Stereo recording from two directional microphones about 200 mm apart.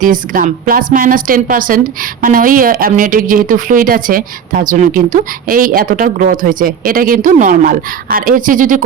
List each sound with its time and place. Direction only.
0.0 s a woman's voice: 40° right (ahead or behind)